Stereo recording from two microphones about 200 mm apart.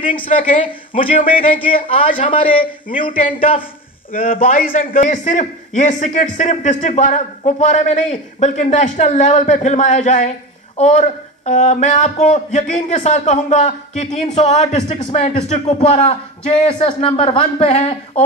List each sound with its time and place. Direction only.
0.0 s a man's voice: 25° left (ahead or behind)
1.4 s a man's voice: 25° left (ahead or behind)
4.1 s speech: 45° left (ahead or behind)